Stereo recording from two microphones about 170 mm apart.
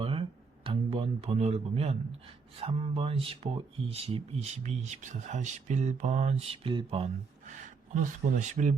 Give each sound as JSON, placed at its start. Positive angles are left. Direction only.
{"t": 0.0, "sound": "a sound", "side_deg": -30}
{"t": 2.6, "sound": "speech", "side_deg": -35}
{"t": 7.9, "sound": "speech", "side_deg": -45}